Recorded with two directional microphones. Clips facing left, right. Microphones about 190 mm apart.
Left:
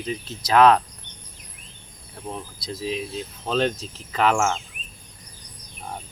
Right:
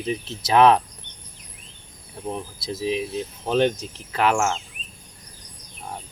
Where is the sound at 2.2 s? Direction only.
15° right (ahead or behind).